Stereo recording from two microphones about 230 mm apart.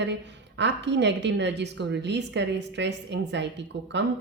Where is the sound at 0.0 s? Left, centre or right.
Right.